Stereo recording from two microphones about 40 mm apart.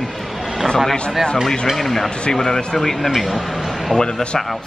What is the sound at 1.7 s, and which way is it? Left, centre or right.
A man's voice, centre.